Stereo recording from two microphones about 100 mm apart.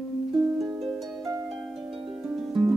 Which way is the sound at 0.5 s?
Centre (ahead or behind).